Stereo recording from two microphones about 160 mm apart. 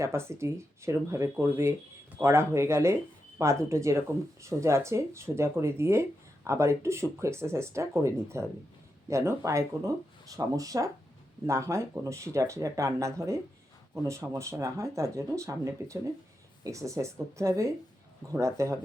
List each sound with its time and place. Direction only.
0.0 s speech: 15° right (ahead or behind)